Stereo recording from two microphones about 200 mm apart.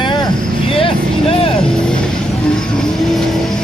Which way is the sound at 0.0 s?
20° left (ahead or behind).